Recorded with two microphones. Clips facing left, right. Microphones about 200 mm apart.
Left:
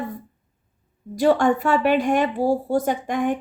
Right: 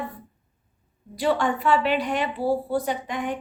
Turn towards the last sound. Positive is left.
turn(degrees=45)  # may be behind; listen again after turning